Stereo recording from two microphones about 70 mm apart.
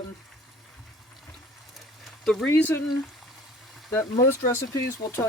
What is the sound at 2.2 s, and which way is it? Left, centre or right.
Speech, centre.